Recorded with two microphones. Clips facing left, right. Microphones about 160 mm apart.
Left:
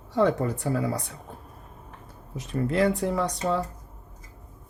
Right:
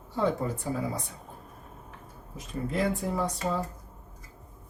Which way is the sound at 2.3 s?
75° left (ahead or behind).